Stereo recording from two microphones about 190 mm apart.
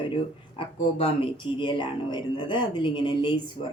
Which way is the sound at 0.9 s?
30° left (ahead or behind).